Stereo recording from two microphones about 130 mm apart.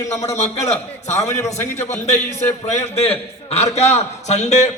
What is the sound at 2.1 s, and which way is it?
A man's voice, 60° left (ahead or behind).